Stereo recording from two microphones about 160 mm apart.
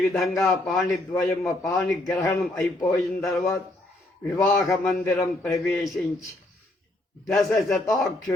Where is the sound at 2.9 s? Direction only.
Centre (ahead or behind).